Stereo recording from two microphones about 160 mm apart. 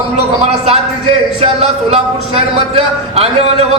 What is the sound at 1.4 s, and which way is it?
A man's voice, 40° right (ahead or behind).